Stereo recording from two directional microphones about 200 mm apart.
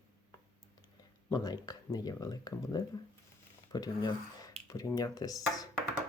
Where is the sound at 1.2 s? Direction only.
20° left (ahead or behind).